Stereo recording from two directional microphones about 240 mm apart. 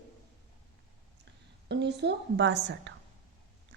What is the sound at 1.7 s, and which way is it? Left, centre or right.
A woman's voice, right.